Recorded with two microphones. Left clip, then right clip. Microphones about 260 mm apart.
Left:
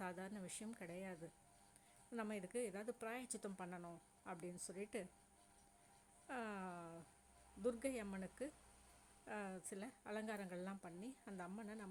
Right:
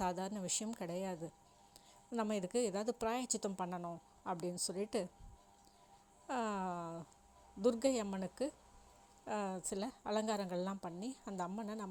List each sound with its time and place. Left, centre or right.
0.0 s a woman's voice: centre
6.2 s a woman's voice: right